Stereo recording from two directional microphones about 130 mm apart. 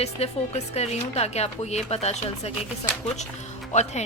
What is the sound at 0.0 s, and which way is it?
Speech, 55° left (ahead or behind).